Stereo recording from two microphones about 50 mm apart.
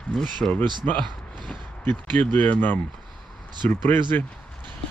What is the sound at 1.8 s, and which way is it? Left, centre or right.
Speech, left.